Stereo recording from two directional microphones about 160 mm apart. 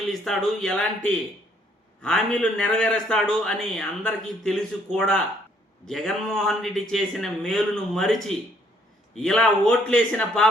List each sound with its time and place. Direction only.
0.1 s a man's voice: centre (ahead or behind)